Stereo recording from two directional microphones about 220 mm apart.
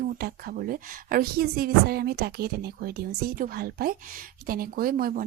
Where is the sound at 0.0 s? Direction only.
45° right (ahead or behind).